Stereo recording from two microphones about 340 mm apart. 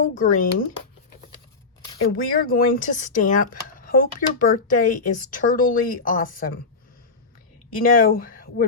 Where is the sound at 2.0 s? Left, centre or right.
Left.